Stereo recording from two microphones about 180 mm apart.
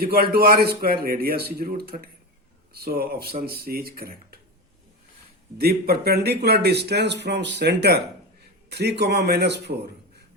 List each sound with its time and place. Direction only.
0.0 s speech: 55° right (ahead or behind)
5.5 s speech: 60° right (ahead or behind)